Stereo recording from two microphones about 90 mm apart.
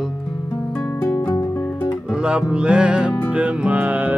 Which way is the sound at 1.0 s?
25° left (ahead or behind).